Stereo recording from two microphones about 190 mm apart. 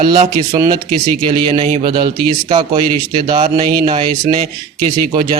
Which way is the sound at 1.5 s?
30° right (ahead or behind).